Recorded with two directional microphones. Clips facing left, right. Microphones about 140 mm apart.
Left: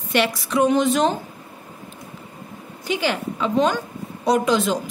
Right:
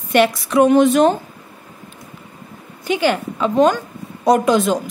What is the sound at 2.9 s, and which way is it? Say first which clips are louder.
A woman's voice: right 5 dB; 55° right (ahead or behind).